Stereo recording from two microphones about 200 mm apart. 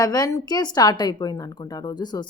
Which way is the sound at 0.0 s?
20° left (ahead or behind).